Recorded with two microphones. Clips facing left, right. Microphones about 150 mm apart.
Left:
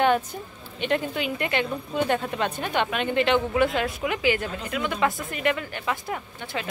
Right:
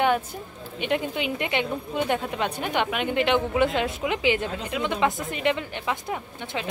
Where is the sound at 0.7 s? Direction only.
10° right (ahead or behind).